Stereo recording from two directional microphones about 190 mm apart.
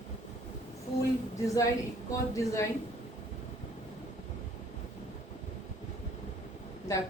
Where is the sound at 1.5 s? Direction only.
15° left (ahead or behind).